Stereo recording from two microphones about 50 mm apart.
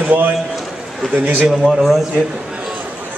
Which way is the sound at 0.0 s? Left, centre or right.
Right.